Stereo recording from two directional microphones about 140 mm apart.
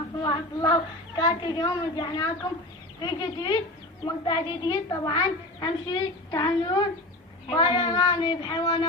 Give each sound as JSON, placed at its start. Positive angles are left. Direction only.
{"t": 0.2, "sound": "a child's voice", "side_deg": 30}